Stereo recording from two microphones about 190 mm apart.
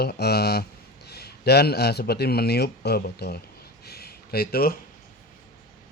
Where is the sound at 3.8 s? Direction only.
55° left (ahead or behind).